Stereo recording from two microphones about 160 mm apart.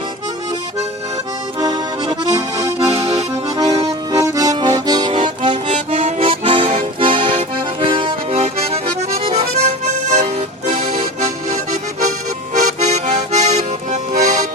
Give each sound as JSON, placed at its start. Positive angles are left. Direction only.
{"t": 1.5, "sound": "accordion", "side_deg": -25}
{"t": 3.1, "sound": "accordion", "side_deg": -40}
{"t": 4.1, "sound": "accordion", "side_deg": -20}
{"t": 5.6, "sound": "accordion", "side_deg": -50}